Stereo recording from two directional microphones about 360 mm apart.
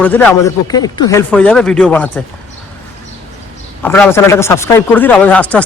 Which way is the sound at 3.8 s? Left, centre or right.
Centre.